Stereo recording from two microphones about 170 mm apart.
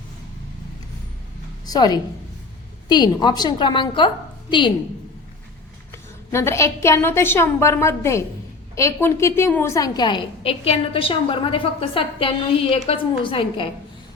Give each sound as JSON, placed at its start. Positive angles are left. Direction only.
{"t": 1.6, "sound": "a woman's voice", "side_deg": 20}
{"t": 5.9, "sound": "a woman's voice", "side_deg": 15}